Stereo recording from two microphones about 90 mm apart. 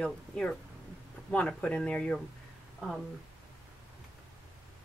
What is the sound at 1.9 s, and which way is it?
Speech, 15° left (ahead or behind).